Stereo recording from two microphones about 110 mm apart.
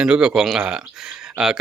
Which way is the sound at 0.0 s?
5° right (ahead or behind).